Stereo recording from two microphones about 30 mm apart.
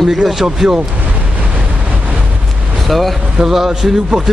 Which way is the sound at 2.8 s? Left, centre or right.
Centre.